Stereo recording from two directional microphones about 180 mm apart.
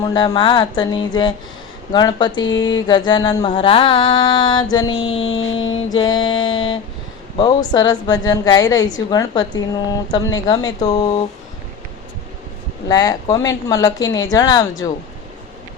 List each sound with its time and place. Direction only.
0.0 s speech: 20° left (ahead or behind)
5.2 s a sound: 90° left
5.6 s mantra: 90° left
6.0 s speech: 25° left (ahead or behind)
7.3 s speech: 20° left (ahead or behind)
12.9 s speech: 20° left (ahead or behind)